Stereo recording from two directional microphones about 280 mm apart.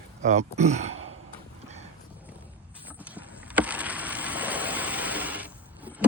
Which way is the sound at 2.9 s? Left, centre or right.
Centre.